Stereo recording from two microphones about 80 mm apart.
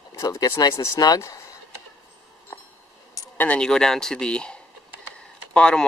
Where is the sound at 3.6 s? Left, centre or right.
Centre.